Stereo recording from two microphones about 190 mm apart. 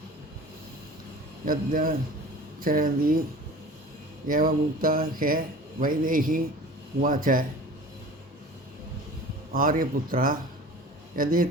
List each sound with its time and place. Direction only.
1.5 s speech: 50° right (ahead or behind)
4.3 s speech: 50° right (ahead or behind)
9.5 s speech: 45° right (ahead or behind)